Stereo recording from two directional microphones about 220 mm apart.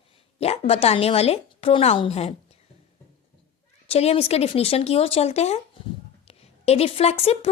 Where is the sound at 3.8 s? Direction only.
30° left (ahead or behind).